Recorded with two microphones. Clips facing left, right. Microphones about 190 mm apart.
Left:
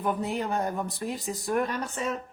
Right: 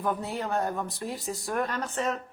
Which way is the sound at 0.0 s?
15° left (ahead or behind).